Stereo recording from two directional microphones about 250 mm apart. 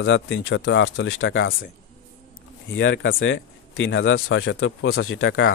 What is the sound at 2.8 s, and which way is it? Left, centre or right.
Speech, left.